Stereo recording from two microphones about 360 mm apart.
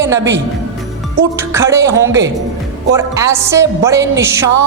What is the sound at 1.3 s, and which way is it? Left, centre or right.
Music, centre.